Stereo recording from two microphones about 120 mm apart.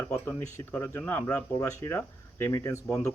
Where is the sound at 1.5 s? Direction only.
25° left (ahead or behind).